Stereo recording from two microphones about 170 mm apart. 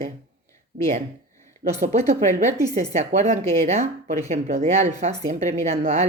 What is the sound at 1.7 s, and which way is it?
Speech, 40° right (ahead or behind).